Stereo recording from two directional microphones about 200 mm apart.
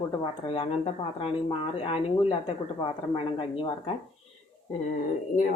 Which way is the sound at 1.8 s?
25° left (ahead or behind).